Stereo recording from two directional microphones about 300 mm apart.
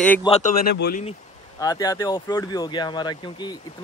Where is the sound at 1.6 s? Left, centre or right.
Centre.